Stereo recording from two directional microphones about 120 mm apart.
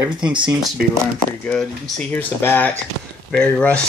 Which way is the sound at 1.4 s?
10° left (ahead or behind).